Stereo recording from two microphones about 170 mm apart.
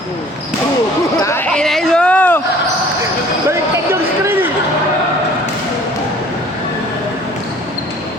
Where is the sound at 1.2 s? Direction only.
15° left (ahead or behind).